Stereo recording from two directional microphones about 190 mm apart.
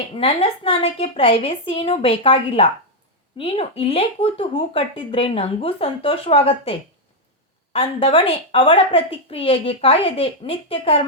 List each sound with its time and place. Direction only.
0.1 s speech: 30° left (ahead or behind)